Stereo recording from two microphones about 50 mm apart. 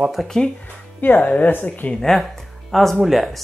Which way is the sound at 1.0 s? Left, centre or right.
Left.